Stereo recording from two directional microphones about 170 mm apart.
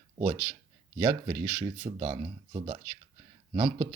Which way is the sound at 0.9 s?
25° right (ahead or behind).